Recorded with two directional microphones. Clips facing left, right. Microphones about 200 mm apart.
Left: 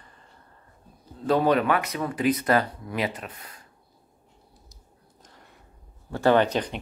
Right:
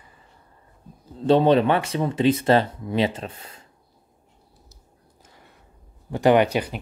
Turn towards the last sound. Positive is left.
turn(degrees=-10)  # may be behind; listen again after turning